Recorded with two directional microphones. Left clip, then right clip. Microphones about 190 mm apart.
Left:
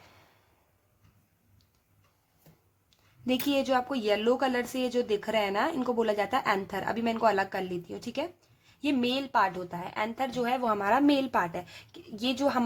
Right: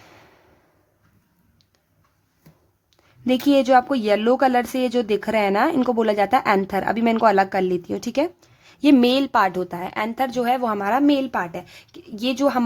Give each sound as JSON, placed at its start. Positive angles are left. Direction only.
{"t": 3.2, "sound": "speech", "side_deg": -35}